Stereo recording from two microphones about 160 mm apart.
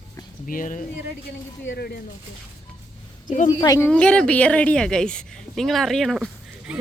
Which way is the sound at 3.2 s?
50° left (ahead or behind).